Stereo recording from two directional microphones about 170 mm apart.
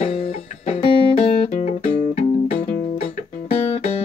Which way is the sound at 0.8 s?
35° left (ahead or behind).